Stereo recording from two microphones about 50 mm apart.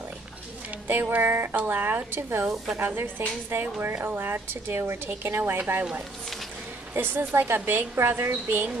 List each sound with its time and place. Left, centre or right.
0.8 s a woman's voice: right
2.5 s a woman's voice: centre
2.8 s a woman's voice: right
7.0 s a woman's voice: right